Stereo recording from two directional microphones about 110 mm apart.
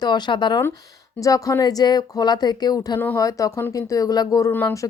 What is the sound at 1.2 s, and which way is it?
Speech, 30° left (ahead or behind).